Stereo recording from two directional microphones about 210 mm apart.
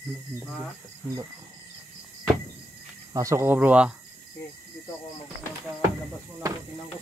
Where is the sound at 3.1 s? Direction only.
15° right (ahead or behind).